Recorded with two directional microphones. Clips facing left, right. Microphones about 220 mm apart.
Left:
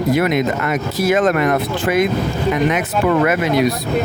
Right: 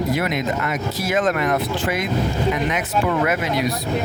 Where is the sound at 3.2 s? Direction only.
60° left (ahead or behind).